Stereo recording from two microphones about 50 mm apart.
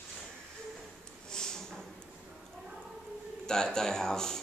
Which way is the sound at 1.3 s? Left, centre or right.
Centre.